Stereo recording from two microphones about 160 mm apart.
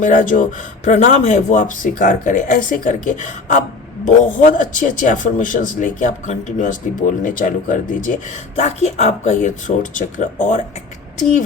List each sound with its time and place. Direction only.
0.0 s speech: 55° left (ahead or behind)